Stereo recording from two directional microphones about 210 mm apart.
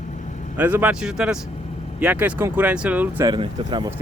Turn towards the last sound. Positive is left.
turn(degrees=-20)  # may be behind; listen again after turning